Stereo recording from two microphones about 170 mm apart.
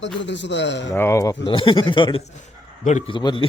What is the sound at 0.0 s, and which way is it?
Speech, 90° left.